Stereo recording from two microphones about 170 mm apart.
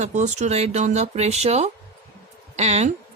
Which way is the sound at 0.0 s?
45° right (ahead or behind).